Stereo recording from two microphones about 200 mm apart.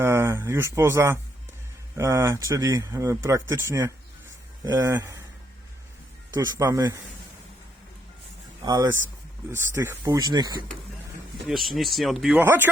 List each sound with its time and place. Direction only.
0.0 s speech: 15° right (ahead or behind)
6.3 s speech: 20° right (ahead or behind)
8.6 s speech: 15° right (ahead or behind)
11.4 s speech: centre (ahead or behind)